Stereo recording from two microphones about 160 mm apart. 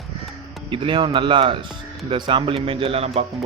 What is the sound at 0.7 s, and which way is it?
Speech, 30° right (ahead or behind).